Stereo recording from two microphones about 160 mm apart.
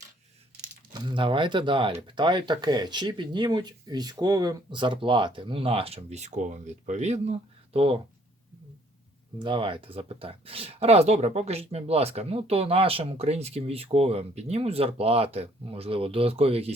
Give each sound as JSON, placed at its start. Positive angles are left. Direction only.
{"t": 0.9, "sound": "speech", "side_deg": -30}
{"t": 9.4, "sound": "speech", "side_deg": -35}